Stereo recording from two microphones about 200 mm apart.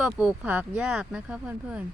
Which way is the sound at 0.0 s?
5° right (ahead or behind).